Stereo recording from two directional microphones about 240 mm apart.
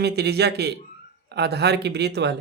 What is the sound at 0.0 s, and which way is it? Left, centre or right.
Speech, right.